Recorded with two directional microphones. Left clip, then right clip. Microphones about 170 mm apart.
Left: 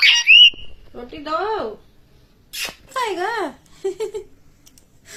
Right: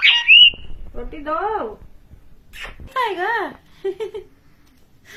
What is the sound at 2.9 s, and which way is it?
Speech, 50° left (ahead or behind).